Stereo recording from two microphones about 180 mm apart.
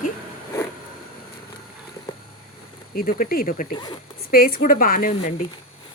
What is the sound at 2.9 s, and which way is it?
Speech, 55° left (ahead or behind).